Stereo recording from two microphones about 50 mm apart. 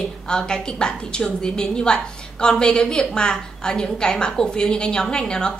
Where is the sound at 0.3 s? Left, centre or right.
Centre.